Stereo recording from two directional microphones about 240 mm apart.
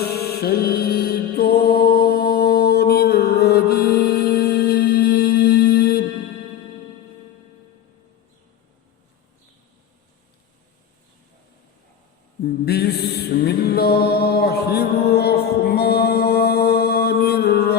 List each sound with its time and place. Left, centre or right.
0.0 s music: left
12.6 s mantra: left